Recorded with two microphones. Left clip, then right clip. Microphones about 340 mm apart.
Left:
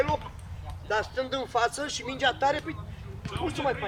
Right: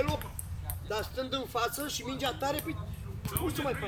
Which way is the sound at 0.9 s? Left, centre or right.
Left.